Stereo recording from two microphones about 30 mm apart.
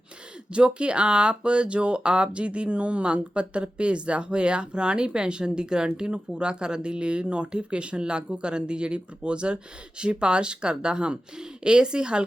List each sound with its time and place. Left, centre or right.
0.5 s speech: right